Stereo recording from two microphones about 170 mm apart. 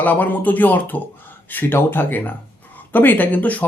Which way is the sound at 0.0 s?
10° left (ahead or behind).